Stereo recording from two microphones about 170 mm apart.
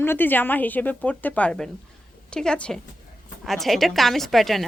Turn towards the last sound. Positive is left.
turn(degrees=0)  # may be behind; listen again after turning